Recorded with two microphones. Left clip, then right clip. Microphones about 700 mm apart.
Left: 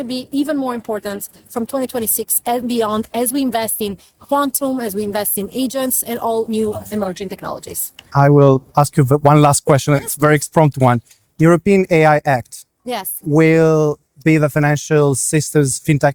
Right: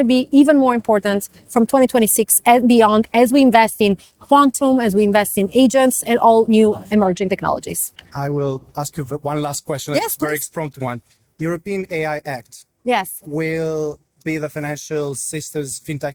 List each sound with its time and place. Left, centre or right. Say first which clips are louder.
0.0 s a woman's voice: right 8 dB; right
8.1 s speech: left 11 dB; left
12.8 s speech: right 6 dB; right
13.3 s speech: left 9 dB; left